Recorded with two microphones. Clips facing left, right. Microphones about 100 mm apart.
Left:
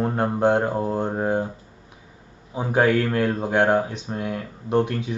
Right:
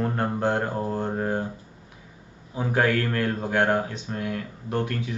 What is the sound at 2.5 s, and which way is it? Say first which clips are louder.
Speech: left 4 dB; 20° left (ahead or behind).